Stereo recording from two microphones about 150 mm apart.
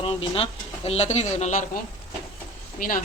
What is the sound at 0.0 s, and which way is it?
Speech, 40° left (ahead or behind).